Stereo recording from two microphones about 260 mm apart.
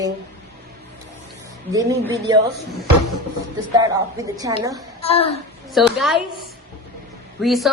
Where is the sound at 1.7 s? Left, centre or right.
Centre.